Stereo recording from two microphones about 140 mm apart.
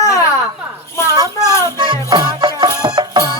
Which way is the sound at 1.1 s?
25° right (ahead or behind).